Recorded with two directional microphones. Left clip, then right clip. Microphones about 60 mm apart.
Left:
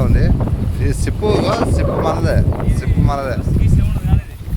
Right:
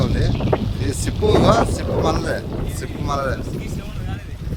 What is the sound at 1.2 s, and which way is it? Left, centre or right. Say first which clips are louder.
Speech: right 1 dB; left.